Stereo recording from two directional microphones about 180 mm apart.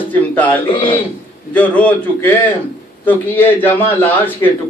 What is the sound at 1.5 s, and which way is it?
A man's voice, 5° left (ahead or behind).